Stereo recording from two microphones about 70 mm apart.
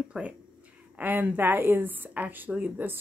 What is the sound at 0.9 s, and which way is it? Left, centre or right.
Speech, right.